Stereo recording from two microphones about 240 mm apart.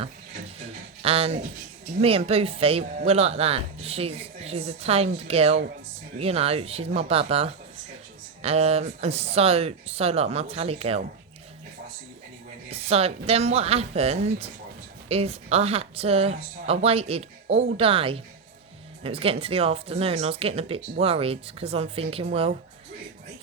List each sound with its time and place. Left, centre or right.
1.0 s speech: right
12.7 s speech: right